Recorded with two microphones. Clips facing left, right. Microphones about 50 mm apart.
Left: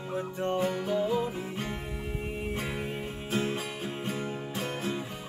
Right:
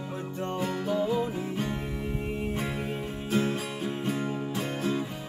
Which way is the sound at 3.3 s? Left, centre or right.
Centre.